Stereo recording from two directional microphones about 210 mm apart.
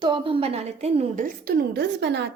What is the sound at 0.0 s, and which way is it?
A woman's voice, 25° right (ahead or behind).